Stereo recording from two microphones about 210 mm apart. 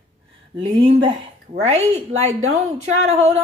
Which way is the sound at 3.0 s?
30° right (ahead or behind).